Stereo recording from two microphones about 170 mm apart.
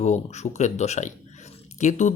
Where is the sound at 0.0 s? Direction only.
40° left (ahead or behind).